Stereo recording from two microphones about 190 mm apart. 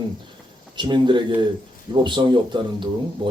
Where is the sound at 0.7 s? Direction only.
25° right (ahead or behind).